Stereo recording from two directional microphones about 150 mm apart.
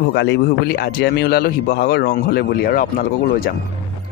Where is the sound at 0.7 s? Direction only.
90° left.